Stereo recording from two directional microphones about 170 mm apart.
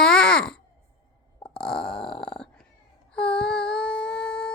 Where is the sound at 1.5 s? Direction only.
5° left (ahead or behind).